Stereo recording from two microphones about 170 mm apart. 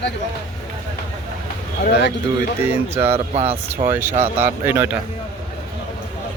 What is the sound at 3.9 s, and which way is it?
A man's voice, 15° right (ahead or behind).